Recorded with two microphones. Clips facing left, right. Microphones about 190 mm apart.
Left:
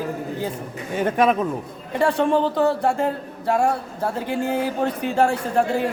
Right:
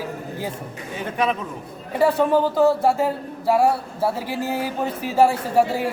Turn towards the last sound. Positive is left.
turn(degrees=-5)  # may be behind; listen again after turning